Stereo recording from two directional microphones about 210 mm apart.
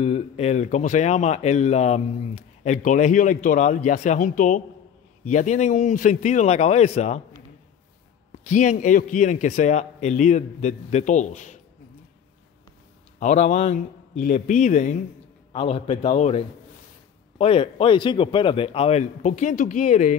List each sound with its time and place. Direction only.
0.0 s speech: 30° left (ahead or behind)
8.5 s speech: 35° left (ahead or behind)
13.2 s speech: 35° left (ahead or behind)
15.5 s speech: 25° left (ahead or behind)